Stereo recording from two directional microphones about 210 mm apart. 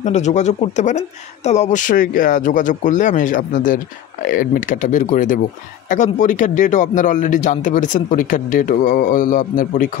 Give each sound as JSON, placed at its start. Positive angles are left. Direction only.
{"t": 0.0, "sound": "a man's voice", "side_deg": 35}